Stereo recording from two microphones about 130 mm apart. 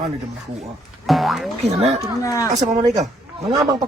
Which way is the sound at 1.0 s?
Centre (ahead or behind).